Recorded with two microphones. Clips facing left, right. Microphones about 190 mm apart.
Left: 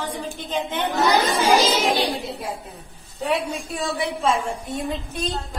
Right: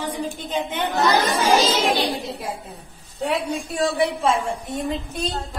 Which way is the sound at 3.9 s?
Centre (ahead or behind).